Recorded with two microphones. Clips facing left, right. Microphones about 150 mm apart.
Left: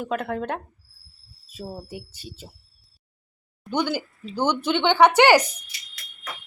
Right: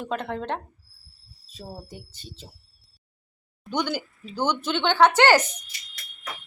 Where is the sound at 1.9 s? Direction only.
10° left (ahead or behind).